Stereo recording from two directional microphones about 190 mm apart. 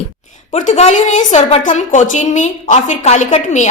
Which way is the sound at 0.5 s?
40° left (ahead or behind).